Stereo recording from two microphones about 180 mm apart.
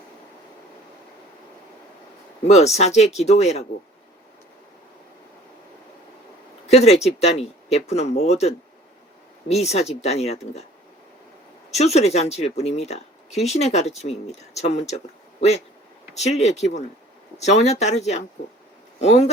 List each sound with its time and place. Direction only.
2.5 s speech: 35° left (ahead or behind)
6.7 s speech: 35° left (ahead or behind)
11.7 s speech: 35° left (ahead or behind)